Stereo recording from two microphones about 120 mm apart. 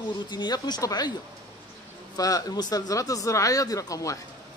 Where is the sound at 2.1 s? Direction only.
30° left (ahead or behind).